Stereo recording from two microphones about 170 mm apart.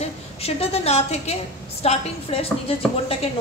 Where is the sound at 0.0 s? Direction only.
35° left (ahead or behind).